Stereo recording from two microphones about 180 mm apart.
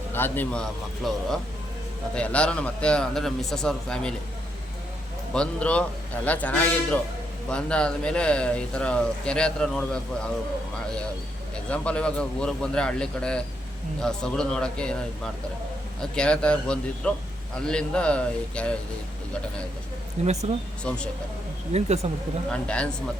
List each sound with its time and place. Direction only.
0.1 s speech: 10° left (ahead or behind)
5.3 s a man's voice: 5° left (ahead or behind)
11.7 s speech: 5° left (ahead or behind)
20.2 s speech: 35° right (ahead or behind)
20.9 s speech: 5° left (ahead or behind)
21.7 s speech: 35° right (ahead or behind)
22.5 s a man's voice: 5° left (ahead or behind)